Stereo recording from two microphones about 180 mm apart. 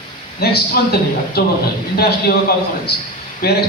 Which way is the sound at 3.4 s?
60° left (ahead or behind).